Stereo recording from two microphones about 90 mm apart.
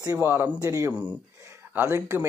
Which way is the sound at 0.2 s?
25° right (ahead or behind).